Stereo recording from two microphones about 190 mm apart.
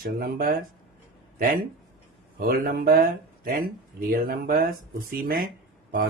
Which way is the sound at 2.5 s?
55° right (ahead or behind).